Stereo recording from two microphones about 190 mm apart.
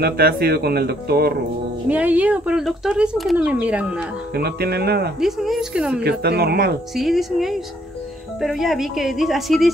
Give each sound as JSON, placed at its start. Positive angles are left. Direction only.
{"t": 0.0, "sound": "speech", "side_deg": -55}
{"t": 1.9, "sound": "speech", "side_deg": -10}
{"t": 4.4, "sound": "speech", "side_deg": -55}
{"t": 5.2, "sound": "speech", "side_deg": 0}
{"t": 6.0, "sound": "speech", "side_deg": -55}
{"t": 7.0, "sound": "speech", "side_deg": 0}